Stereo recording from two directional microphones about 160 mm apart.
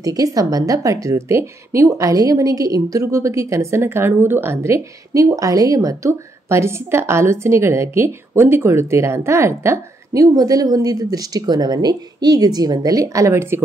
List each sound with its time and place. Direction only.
0.0 s a woman's voice: 20° right (ahead or behind)